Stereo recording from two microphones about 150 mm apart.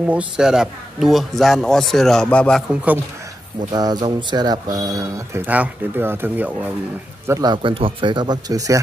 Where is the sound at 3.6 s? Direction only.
25° right (ahead or behind); by 6.6 s 10° right (ahead or behind).